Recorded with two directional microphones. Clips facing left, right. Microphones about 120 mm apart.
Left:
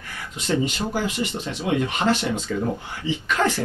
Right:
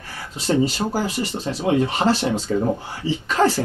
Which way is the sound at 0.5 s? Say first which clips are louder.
Right 4 dB; 35° right (ahead or behind).